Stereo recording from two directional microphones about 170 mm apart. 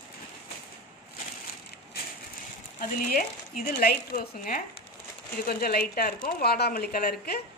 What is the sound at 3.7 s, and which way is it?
A woman's voice, 55° left (ahead or behind).